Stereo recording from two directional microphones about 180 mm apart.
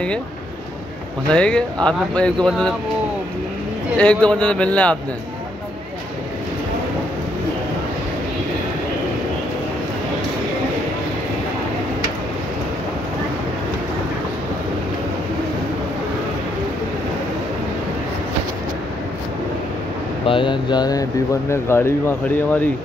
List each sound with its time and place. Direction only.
1.3 s speech: 5° left (ahead or behind)
4.0 s speech: 5° left (ahead or behind)
20.2 s speech: 25° left (ahead or behind)